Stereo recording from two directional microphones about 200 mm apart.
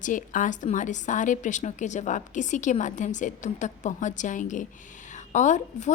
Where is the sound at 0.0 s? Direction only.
40° left (ahead or behind).